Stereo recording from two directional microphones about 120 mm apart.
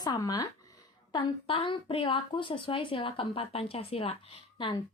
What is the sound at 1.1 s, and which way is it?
A woman's voice, 45° left (ahead or behind).